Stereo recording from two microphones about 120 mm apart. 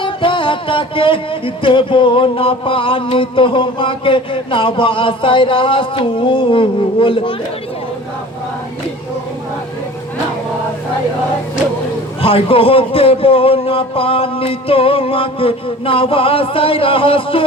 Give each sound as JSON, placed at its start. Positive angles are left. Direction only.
{"t": 0.0, "sound": "music", "side_deg": 45}
{"t": 12.2, "sound": "music", "side_deg": 50}